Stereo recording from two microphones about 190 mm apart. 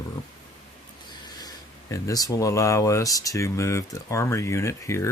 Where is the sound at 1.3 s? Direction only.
20° left (ahead or behind).